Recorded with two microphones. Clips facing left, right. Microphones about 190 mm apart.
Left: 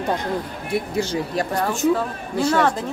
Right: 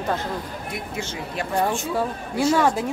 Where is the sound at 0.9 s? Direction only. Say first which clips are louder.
Left 7 dB; 35° left (ahead or behind).